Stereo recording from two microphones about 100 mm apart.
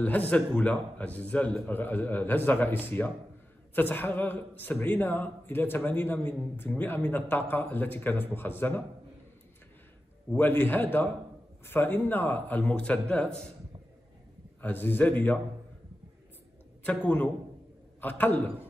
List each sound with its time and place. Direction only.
0.0 s a man's voice: 15° left (ahead or behind)
10.3 s a man's voice: 20° left (ahead or behind)
14.6 s a man's voice: 20° left (ahead or behind)
16.8 s a man's voice: 15° left (ahead or behind)